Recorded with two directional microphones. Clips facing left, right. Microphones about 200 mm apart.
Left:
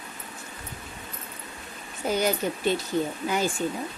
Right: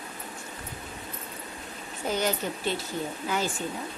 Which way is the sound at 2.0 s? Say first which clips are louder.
Left 3 dB; 10° left (ahead or behind).